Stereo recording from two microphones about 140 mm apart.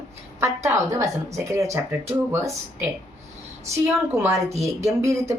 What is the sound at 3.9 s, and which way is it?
A woman's voice, 15° right (ahead or behind).